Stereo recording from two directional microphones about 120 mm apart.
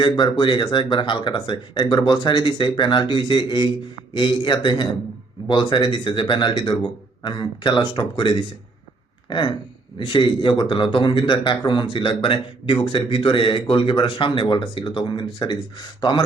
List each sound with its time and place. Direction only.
0.0 s a man's voice: 40° left (ahead or behind)